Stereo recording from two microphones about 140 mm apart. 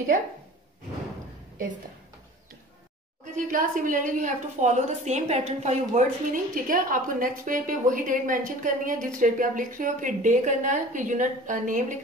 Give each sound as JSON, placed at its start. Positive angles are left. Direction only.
{"t": 3.3, "sound": "a woman's voice", "side_deg": -75}